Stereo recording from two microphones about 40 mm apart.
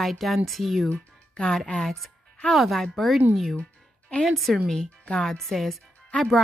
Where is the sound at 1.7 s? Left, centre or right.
Left.